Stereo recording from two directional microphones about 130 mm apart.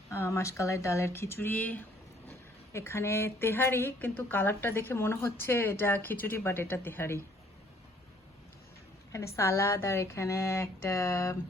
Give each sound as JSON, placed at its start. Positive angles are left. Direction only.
{"t": 0.1, "sound": "a woman's voice", "side_deg": 20}
{"t": 9.1, "sound": "a woman's voice", "side_deg": 20}